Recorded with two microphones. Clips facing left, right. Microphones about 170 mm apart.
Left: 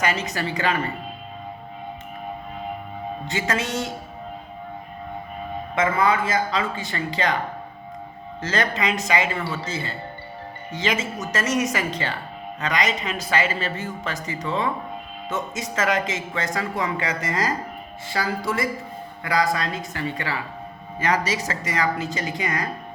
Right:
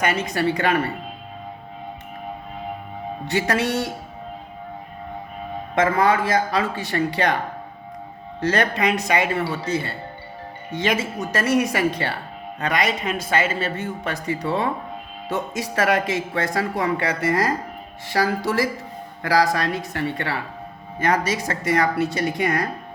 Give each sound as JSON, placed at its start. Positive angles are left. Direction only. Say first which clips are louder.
{"t": 0.0, "sound": "speech", "louder": "right 3 dB", "side_deg": -55}
{"t": 3.2, "sound": "speech", "louder": "right 5 dB", "side_deg": -65}
{"t": 6.0, "sound": "a man's voice", "louder": "right 1 dB", "side_deg": -70}
{"t": 8.4, "sound": "a man's voice", "louder": "right 4 dB", "side_deg": -60}
{"t": 18.1, "sound": "a man's voice", "louder": "right 4 dB", "side_deg": -70}